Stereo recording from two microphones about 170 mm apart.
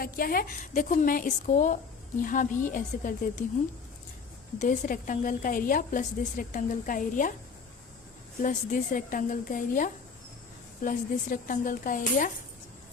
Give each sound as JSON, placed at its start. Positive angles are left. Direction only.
{"t": 0.0, "sound": "a woman's voice", "side_deg": 60}
{"t": 4.6, "sound": "a woman's voice", "side_deg": 50}
{"t": 8.4, "sound": "a woman's voice", "side_deg": 50}